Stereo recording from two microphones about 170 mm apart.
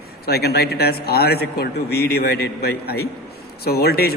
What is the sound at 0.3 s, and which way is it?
A man's voice, 70° left (ahead or behind).